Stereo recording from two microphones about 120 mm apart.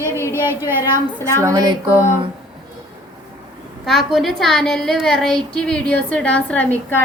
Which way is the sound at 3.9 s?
Centre (ahead or behind).